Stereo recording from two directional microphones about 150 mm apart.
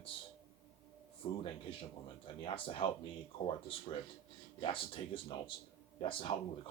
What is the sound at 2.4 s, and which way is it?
Speech, 35° left (ahead or behind).